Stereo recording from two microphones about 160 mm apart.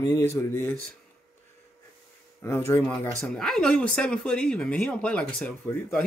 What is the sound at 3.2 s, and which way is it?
Speech, 5° left (ahead or behind).